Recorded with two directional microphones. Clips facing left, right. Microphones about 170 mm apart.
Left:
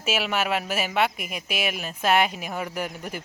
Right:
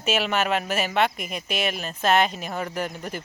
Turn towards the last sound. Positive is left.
turn(degrees=10)  # may be behind; listen again after turning